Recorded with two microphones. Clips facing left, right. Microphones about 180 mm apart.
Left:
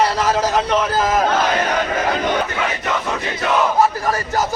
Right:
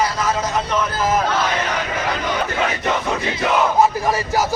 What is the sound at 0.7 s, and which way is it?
Speech, 40° left (ahead or behind).